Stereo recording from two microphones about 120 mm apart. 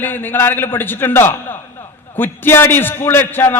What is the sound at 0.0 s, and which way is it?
A man's voice, 15° left (ahead or behind).